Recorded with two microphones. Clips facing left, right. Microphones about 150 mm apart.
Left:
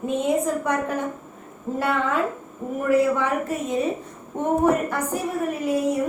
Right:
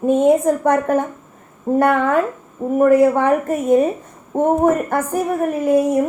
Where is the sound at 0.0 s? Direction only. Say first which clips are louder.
Right 9 dB; 50° right (ahead or behind).